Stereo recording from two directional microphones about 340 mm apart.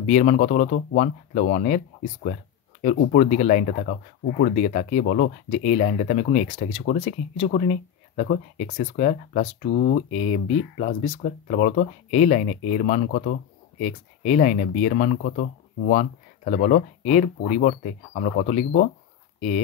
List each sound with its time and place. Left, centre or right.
0.0 s speech: left
2.8 s speech: left